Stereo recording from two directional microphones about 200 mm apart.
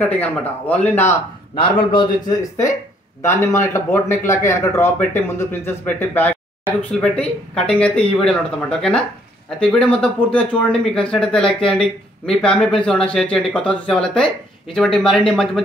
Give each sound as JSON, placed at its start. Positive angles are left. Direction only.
{"t": 0.0, "sound": "speech", "side_deg": 10}
{"t": 1.9, "sound": "speech", "side_deg": 20}